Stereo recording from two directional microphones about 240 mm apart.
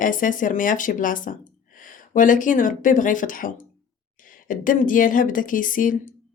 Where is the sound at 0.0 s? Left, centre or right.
Left.